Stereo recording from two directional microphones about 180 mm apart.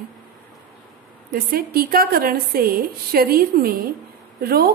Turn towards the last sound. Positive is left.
turn(degrees=-60)  # may be behind; listen again after turning